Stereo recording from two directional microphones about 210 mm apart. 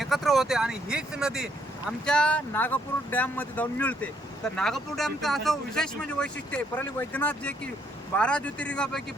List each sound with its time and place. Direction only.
0.0 s speech: centre (ahead or behind)